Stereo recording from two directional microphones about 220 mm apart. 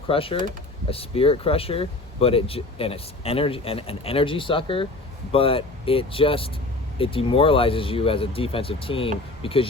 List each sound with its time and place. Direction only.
0.1 s speech: 25° left (ahead or behind)